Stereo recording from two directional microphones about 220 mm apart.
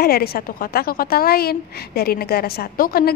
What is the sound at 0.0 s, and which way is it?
A woman's voice, 45° left (ahead or behind).